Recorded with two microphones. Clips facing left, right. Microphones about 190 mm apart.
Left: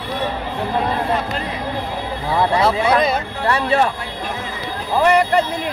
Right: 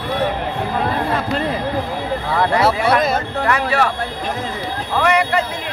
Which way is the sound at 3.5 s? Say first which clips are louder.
Left 2 dB; 30° left (ahead or behind).